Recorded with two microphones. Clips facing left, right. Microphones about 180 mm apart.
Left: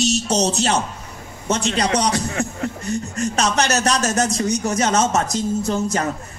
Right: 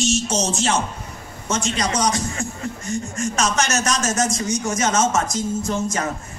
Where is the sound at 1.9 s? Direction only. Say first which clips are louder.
Left 2 dB; 65° left (ahead or behind).